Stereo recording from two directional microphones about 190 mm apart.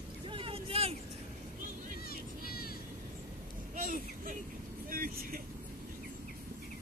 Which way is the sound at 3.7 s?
45° right (ahead or behind).